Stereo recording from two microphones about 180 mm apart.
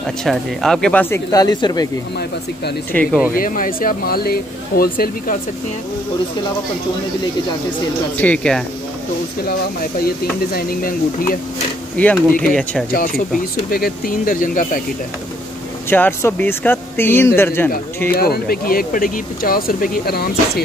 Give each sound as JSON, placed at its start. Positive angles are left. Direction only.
{"t": 0.0, "sound": "speech", "side_deg": 0}
{"t": 1.1, "sound": "speech", "side_deg": 20}
{"t": 2.9, "sound": "speech", "side_deg": 10}
{"t": 3.3, "sound": "speech", "side_deg": 50}
{"t": 8.2, "sound": "speech", "side_deg": 5}
{"t": 9.4, "sound": "speech", "side_deg": 55}
{"t": 12.0, "sound": "speech", "side_deg": 10}
{"t": 12.9, "sound": "speech", "side_deg": 55}
{"t": 15.9, "sound": "speech", "side_deg": 10}
{"t": 18.1, "sound": "speech", "side_deg": 55}